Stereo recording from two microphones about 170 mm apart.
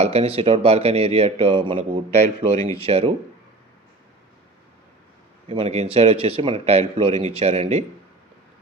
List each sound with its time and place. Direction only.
0.0 s a man's voice: 35° right (ahead or behind)
5.5 s a man's voice: 35° right (ahead or behind)